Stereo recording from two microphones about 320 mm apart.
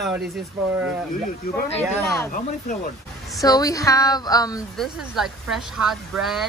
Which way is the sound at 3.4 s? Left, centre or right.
Centre.